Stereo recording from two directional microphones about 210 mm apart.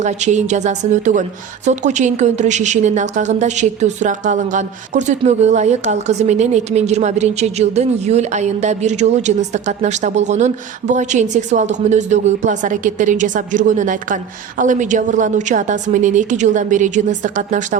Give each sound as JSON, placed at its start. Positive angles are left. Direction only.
{"t": 0.0, "sound": "a woman's voice", "side_deg": -35}